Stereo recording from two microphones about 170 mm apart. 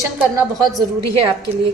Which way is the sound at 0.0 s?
15° right (ahead or behind).